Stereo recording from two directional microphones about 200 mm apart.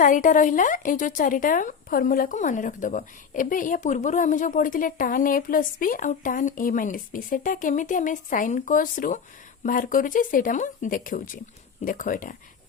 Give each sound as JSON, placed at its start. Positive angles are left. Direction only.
{"t": 0.0, "sound": "a woman's voice", "side_deg": 40}